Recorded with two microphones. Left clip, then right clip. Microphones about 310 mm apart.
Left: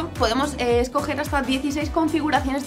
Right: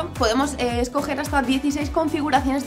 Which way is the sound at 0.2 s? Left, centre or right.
Left.